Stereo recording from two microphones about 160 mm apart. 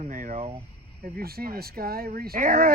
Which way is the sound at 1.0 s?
65° right (ahead or behind).